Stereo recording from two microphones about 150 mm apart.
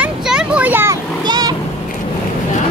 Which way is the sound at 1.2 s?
30° right (ahead or behind).